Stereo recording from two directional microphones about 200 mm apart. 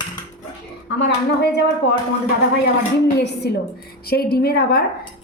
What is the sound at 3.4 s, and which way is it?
A woman's voice, 55° left (ahead or behind).